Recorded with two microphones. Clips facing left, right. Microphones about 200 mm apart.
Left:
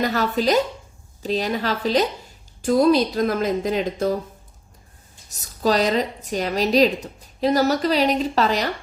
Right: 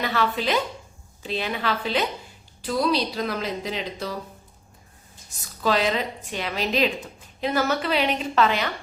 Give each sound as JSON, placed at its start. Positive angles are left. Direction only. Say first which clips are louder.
{"t": 0.0, "sound": "a woman's voice", "louder": "left 4 dB", "side_deg": 40}
{"t": 5.3, "sound": "a woman's voice", "louder": "left 3 dB", "side_deg": 40}